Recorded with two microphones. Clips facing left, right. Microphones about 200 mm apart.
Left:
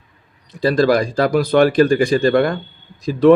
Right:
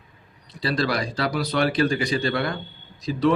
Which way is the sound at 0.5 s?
45° left (ahead or behind).